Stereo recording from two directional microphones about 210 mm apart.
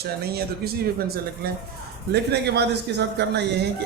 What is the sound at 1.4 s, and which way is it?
A man's voice, 50° right (ahead or behind).